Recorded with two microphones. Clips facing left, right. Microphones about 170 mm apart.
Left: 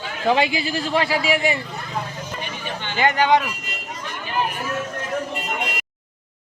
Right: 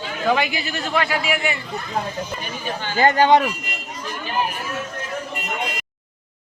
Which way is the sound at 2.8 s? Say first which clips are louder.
Right 3 dB; 35° right (ahead or behind).